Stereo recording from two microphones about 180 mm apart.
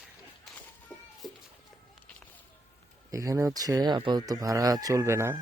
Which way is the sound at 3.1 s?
15° right (ahead or behind).